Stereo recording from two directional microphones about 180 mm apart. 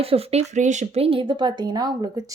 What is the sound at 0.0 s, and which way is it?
Speech, 35° right (ahead or behind).